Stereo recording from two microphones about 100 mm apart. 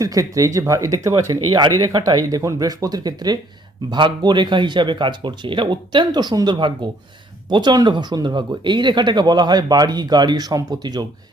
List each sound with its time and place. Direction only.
0.0 s speech: 35° right (ahead or behind)